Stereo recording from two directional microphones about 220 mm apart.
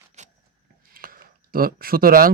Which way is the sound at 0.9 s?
40° right (ahead or behind).